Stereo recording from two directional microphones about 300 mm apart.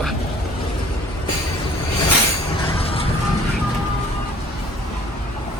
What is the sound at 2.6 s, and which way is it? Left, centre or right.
Vehicle, centre.